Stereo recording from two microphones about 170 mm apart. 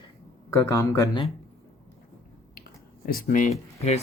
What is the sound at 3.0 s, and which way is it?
Speech, 55° left (ahead or behind).